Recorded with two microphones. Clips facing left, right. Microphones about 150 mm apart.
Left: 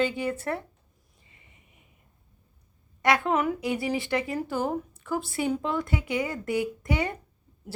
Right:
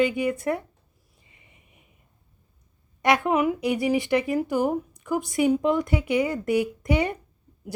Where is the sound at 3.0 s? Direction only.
20° right (ahead or behind).